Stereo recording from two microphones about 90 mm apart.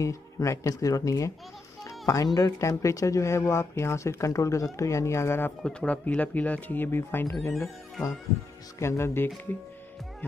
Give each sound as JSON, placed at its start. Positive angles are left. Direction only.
{"t": 0.0, "sound": "speech", "side_deg": 35}
{"t": 1.9, "sound": "a sound", "side_deg": 35}
{"t": 2.6, "sound": "speech", "side_deg": 35}
{"t": 5.6, "sound": "speech", "side_deg": 10}
{"t": 7.5, "sound": "music", "side_deg": 0}
{"t": 8.7, "sound": "speech", "side_deg": 30}